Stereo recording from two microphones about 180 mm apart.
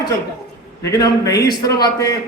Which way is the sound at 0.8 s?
20° left (ahead or behind).